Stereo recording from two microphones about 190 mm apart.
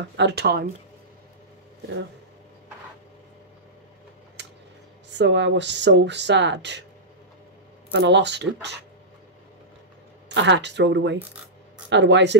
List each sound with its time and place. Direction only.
0.2 s speech: 60° right (ahead or behind)
5.1 s speech: 70° right (ahead or behind)
7.9 s speech: 65° right (ahead or behind)
10.3 s speech: 70° right (ahead or behind)